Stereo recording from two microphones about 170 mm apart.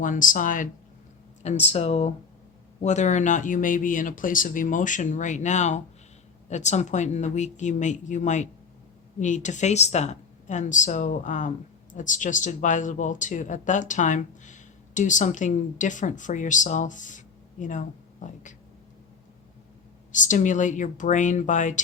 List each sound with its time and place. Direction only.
0.0 s speech: 50° left (ahead or behind)
20.1 s speech: 45° left (ahead or behind)